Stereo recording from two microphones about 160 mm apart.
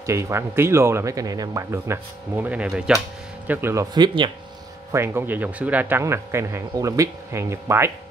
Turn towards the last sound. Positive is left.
turn(degrees=-15)  # may be behind; listen again after turning